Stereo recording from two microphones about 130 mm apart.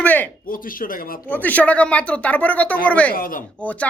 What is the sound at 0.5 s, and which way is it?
Speech, 90° left.